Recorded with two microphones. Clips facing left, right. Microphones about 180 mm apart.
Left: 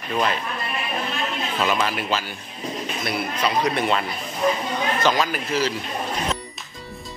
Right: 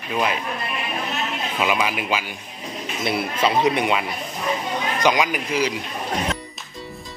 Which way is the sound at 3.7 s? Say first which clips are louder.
Right 1 dB; 15° right (ahead or behind).